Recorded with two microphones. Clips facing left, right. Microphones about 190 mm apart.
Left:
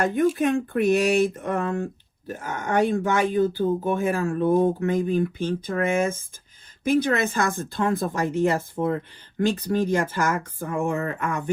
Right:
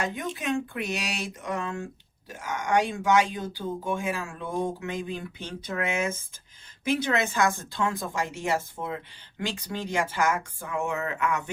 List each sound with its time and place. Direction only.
0.0 s speech: 55° left (ahead or behind)